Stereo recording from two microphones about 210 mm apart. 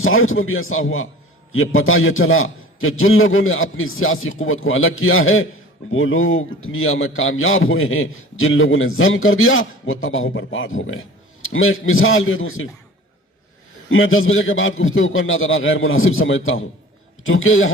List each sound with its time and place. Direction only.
0.0 s a man's voice: 75° left (ahead or behind)
13.9 s a man's voice: 70° left (ahead or behind)